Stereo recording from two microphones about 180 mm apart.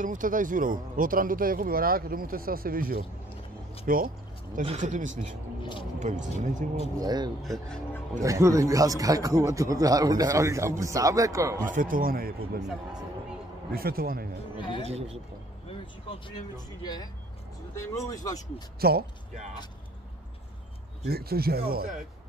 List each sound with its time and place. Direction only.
0.0 s speech: 45° right (ahead or behind)
5.6 s speech: 25° left (ahead or behind)
5.9 s speech: 45° right (ahead or behind)
7.0 s a man's voice: 20° right (ahead or behind)
7.4 s speech: 5° left (ahead or behind)
8.2 s a man's voice: 15° right (ahead or behind)
11.6 s speech: 50° right (ahead or behind)
13.7 s speech: 55° right (ahead or behind)
14.8 s speech: 35° right (ahead or behind)
15.7 s speech: 25° left (ahead or behind)
18.8 s speech: 60° right (ahead or behind)
21.0 s speech: 60° right (ahead or behind)